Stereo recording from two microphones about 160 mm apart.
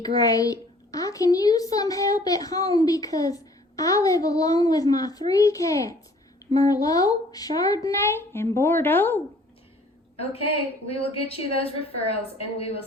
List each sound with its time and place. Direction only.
0.0 s a child's voice: 25° left (ahead or behind)
10.2 s a woman's voice: 35° left (ahead or behind)